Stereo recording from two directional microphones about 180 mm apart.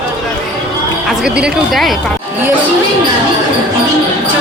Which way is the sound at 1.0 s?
5° right (ahead or behind).